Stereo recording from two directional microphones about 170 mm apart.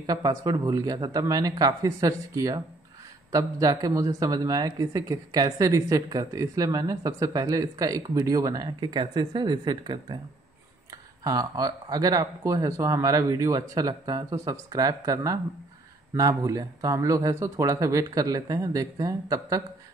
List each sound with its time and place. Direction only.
0.0 s speech: 20° right (ahead or behind)
11.2 s speech: 20° right (ahead or behind)